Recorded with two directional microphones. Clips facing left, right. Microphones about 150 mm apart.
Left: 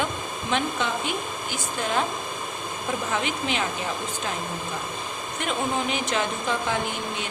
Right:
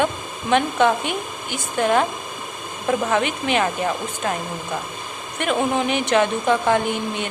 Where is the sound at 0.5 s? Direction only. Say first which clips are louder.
Right 9 dB; 60° right (ahead or behind).